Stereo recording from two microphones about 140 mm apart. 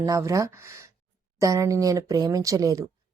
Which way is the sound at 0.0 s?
25° right (ahead or behind).